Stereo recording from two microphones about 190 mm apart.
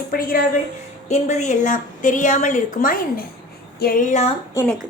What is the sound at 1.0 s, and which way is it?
A woman's voice, 40° left (ahead or behind).